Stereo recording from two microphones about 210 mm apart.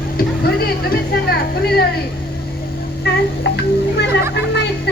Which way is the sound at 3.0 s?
55° left (ahead or behind).